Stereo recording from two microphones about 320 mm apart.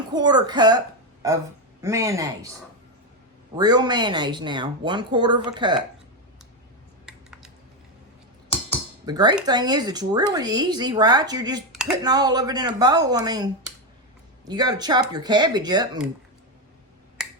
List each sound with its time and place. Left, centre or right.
0.1 s speech: centre
1.8 s speech: centre
3.5 s speech: centre
7.0 s typing: centre
9.0 s speech: centre
11.7 s a sound: centre
12.0 s speech: centre
17.2 s finger snapping: centre